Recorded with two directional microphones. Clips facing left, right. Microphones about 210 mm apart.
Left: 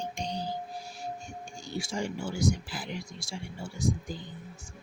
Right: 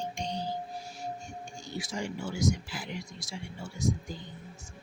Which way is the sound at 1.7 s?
30° left (ahead or behind).